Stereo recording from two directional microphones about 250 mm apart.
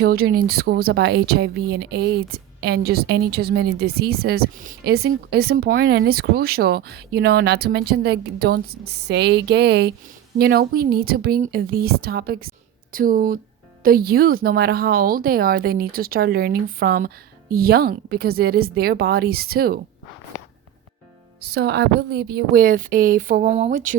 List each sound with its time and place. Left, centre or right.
0.0 s speech: right
21.4 s speech: right